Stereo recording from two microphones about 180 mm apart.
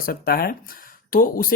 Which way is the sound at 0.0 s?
55° left (ahead or behind).